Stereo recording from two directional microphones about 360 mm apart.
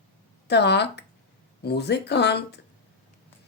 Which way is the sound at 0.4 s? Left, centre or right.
Left.